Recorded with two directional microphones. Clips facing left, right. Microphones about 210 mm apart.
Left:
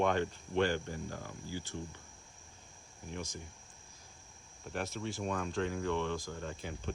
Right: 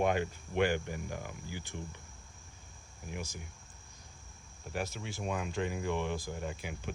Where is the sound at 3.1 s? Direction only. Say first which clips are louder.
Even; 5° right (ahead or behind).